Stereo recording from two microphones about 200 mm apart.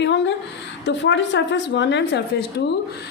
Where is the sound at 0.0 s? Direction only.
60° left (ahead or behind).